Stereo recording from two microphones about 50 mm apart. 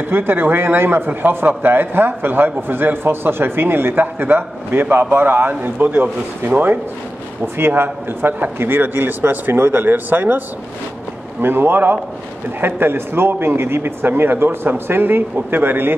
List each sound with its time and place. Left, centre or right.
0.1 s a man's voice: right
7.4 s a man's voice: right
11.4 s a man's voice: right